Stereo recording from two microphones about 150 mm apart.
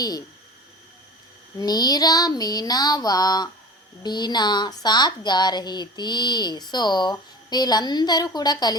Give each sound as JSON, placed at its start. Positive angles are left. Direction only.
{"t": 0.0, "sound": "speech", "side_deg": 25}
{"t": 1.5, "sound": "speech", "side_deg": 25}